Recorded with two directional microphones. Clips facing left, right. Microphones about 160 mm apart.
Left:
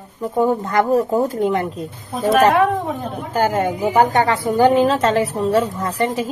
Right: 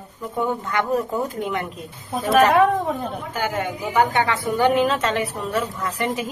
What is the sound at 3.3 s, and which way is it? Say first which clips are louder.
A woman's voice: left 9 dB; 40° left (ahead or behind).